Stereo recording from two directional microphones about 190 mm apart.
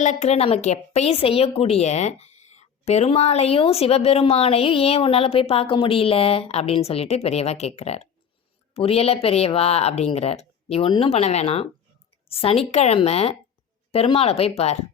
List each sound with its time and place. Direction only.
0.0 s a woman's voice: 40° left (ahead or behind)